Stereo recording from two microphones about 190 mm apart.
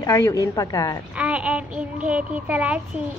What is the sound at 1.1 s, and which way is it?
A child's voice, 5° right (ahead or behind).